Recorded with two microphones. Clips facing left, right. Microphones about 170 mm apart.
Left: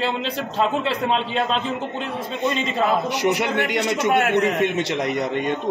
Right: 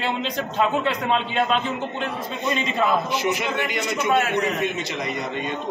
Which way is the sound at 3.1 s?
70° left (ahead or behind).